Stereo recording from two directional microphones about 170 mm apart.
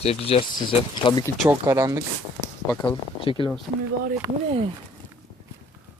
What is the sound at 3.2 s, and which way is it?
Speech, 30° left (ahead or behind).